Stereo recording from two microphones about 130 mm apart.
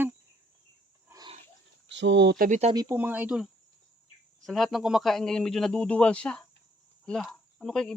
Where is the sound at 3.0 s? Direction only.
10° right (ahead or behind).